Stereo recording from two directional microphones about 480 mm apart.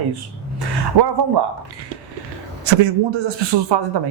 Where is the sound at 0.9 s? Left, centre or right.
Right.